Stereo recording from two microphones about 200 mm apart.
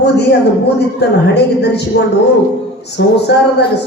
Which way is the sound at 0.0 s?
55° left (ahead or behind).